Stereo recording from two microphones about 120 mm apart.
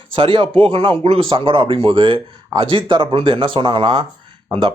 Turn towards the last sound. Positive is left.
turn(degrees=-45)  # may be behind; listen again after turning